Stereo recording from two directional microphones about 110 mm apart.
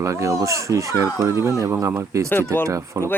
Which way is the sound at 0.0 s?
30° right (ahead or behind).